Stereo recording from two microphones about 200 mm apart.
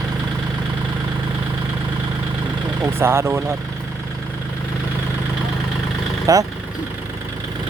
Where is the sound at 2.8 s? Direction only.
15° right (ahead or behind).